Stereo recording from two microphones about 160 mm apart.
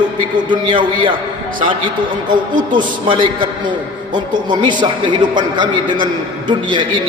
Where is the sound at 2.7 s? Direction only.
30° right (ahead or behind).